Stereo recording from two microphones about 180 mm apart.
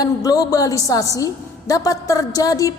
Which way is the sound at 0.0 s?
20° left (ahead or behind).